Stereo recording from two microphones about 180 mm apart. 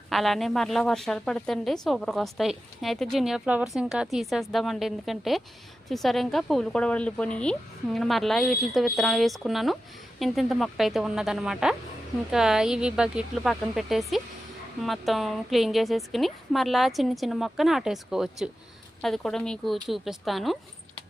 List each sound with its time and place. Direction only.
0.1 s a woman's voice: centre (ahead or behind)